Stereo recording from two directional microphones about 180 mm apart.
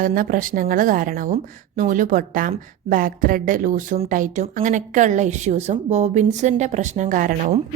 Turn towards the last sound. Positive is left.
turn(degrees=-45)  # may be behind; listen again after turning